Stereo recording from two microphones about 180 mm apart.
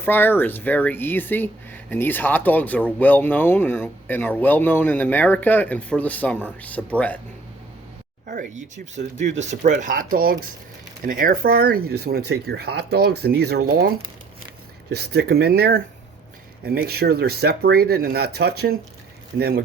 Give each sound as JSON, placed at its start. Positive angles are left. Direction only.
{"t": 0.0, "sound": "speech", "side_deg": 10}
{"t": 8.3, "sound": "speech", "side_deg": -45}
{"t": 14.9, "sound": "speech", "side_deg": -65}